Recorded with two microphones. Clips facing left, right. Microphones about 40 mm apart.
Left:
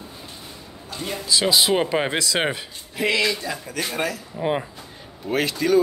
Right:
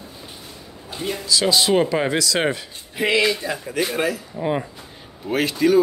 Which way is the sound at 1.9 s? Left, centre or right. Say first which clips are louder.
Right 2 dB; left.